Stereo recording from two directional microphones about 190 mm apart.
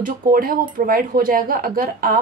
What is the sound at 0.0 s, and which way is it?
A woman's voice, 50° right (ahead or behind).